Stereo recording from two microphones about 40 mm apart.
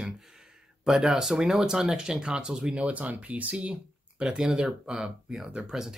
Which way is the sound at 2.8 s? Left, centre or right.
Right.